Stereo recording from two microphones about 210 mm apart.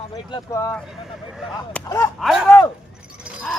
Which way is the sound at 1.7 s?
5° left (ahead or behind).